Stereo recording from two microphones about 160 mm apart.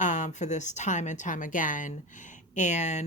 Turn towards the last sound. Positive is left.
turn(degrees=45)  # may be behind; listen again after turning